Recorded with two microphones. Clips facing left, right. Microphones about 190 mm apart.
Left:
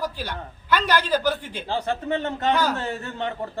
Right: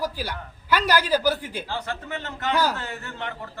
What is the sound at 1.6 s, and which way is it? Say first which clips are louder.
A man's voice: left 6 dB; 25° left (ahead or behind).